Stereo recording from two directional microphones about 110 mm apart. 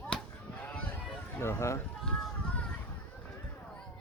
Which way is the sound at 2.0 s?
5° left (ahead or behind).